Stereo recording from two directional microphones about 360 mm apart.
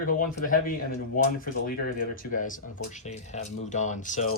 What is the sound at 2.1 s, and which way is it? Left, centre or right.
Speech, left.